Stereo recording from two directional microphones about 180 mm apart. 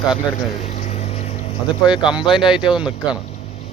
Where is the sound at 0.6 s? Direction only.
35° left (ahead or behind).